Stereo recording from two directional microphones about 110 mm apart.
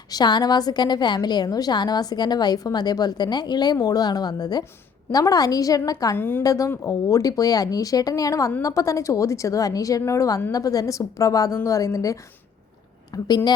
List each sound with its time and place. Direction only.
0.1 s a woman's voice: 40° left (ahead or behind)
6.1 s a woman's voice: 20° left (ahead or behind)
6.4 s a woman's voice: 30° left (ahead or behind)